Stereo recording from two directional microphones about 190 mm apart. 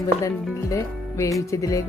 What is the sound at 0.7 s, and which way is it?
Music, 15° left (ahead or behind).